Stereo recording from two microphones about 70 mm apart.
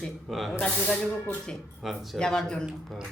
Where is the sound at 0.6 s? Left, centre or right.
Centre.